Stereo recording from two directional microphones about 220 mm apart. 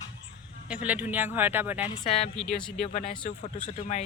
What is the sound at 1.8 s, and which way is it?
Speech, 30° left (ahead or behind).